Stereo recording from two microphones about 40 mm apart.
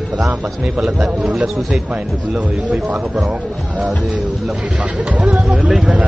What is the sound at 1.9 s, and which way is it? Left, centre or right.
Speech, right.